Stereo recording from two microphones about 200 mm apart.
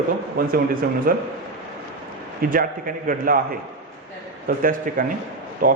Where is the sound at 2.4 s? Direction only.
45° right (ahead or behind).